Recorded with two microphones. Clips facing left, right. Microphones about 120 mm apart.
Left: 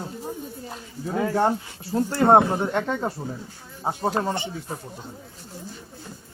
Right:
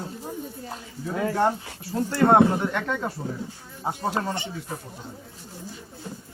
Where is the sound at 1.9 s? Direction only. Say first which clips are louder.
Left 2 dB; 30° left (ahead or behind).